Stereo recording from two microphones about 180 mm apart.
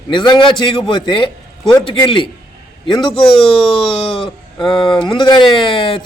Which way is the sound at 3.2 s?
5° left (ahead or behind).